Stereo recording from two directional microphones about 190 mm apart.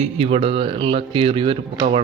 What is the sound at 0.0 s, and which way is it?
Speech, 35° right (ahead or behind).